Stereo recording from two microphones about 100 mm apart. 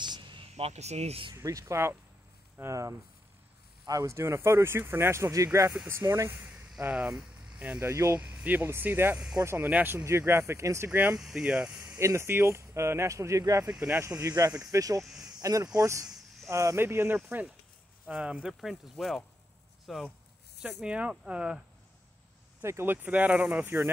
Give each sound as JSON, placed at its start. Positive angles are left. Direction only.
{"t": 0.0, "sound": "a sound", "side_deg": -50}
{"t": 1.3, "sound": "speech", "side_deg": -35}
{"t": 6.8, "sound": "speech", "side_deg": -15}
{"t": 7.9, "sound": "speech", "side_deg": -30}
{"t": 8.2, "sound": "speech", "side_deg": -15}
{"t": 9.7, "sound": "speech", "side_deg": -15}
{"t": 11.1, "sound": "speech", "side_deg": 0}
{"t": 12.0, "sound": "speech", "side_deg": -30}
{"t": 13.7, "sound": "speech", "side_deg": -15}
{"t": 15.0, "sound": "snake", "side_deg": -5}
{"t": 15.4, "sound": "speech", "side_deg": -35}
{"t": 18.0, "sound": "speech", "side_deg": -10}
{"t": 20.6, "sound": "speech", "side_deg": -10}
{"t": 22.6, "sound": "speech", "side_deg": -25}